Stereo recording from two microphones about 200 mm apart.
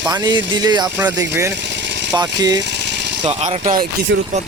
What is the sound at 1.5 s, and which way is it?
Vehicle, 60° right (ahead or behind).